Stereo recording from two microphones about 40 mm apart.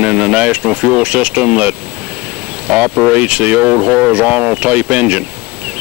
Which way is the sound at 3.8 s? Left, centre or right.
Right.